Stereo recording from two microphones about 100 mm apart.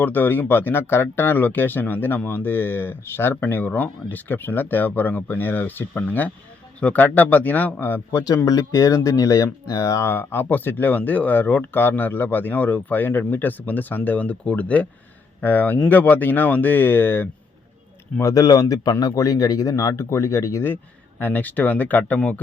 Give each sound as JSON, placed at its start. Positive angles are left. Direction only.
{"t": 0.0, "sound": "a man's voice", "side_deg": 20}
{"t": 8.4, "sound": "a man's voice", "side_deg": 35}
{"t": 18.2, "sound": "a man's voice", "side_deg": 35}